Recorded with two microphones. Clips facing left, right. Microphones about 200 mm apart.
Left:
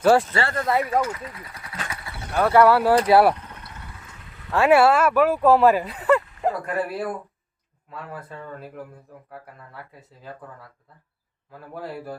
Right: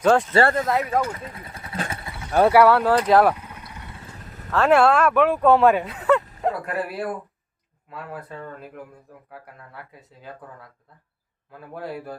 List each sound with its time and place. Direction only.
0.0 s speech: 5° left (ahead or behind)
1.1 s speech: 25° right (ahead or behind)
1.9 s vehicle: 25° right (ahead or behind)
2.5 s speech: centre (ahead or behind)
3.3 s vehicle: 10° right (ahead or behind)
3.9 s a sound: 30° right (ahead or behind)
4.5 s speech: 10° left (ahead or behind)
11.5 s speech: centre (ahead or behind)